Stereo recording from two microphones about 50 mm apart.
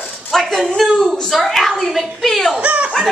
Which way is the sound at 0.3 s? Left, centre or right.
Centre.